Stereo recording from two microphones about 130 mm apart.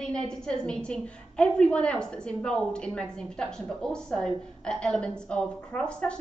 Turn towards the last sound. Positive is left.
turn(degrees=5)  # may be behind; listen again after turning